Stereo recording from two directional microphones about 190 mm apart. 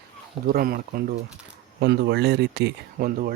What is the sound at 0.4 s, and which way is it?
Speech, 50° right (ahead or behind).